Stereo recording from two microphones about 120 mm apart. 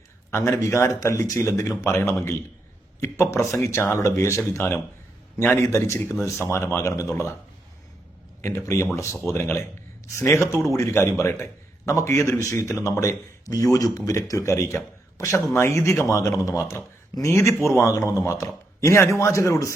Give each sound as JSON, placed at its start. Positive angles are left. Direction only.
{"t": 0.3, "sound": "speech", "side_deg": 20}
{"t": 8.4, "sound": "speech", "side_deg": 25}